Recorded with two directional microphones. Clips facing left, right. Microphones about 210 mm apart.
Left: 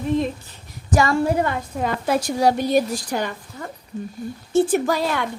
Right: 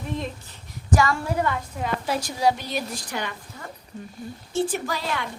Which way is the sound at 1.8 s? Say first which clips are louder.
Left 6 dB; 55° left (ahead or behind).